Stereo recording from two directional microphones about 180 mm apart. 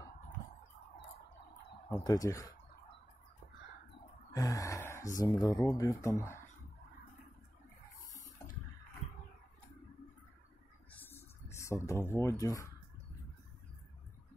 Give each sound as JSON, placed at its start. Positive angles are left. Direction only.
{"t": 1.9, "sound": "speech", "side_deg": 20}
{"t": 4.3, "sound": "sigh", "side_deg": 20}
{"t": 5.2, "sound": "speech", "side_deg": 20}
{"t": 10.9, "sound": "a sound", "side_deg": 10}
{"t": 12.1, "sound": "speech", "side_deg": 15}